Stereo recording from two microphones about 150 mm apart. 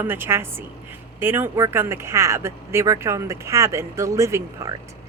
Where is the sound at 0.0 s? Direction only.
15° right (ahead or behind).